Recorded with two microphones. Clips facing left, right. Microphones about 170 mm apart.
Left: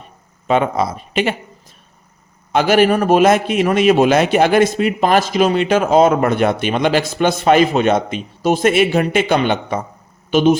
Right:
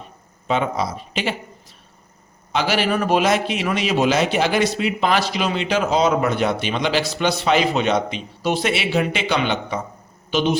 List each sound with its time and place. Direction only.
0.4 s speech: 55° left (ahead or behind)
2.5 s a man's voice: 50° left (ahead or behind)